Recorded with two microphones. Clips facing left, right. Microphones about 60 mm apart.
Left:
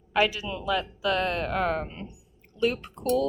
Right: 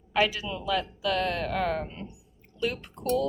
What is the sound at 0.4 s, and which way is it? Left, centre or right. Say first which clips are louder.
A woman's voice: left 1 dB; left.